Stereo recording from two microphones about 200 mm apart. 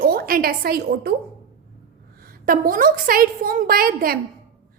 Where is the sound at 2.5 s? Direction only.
45° right (ahead or behind).